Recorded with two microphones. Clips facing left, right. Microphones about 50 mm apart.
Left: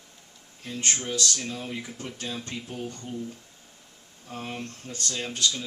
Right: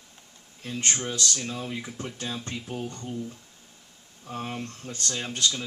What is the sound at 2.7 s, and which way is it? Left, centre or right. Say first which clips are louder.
Speech: right 1 dB; right.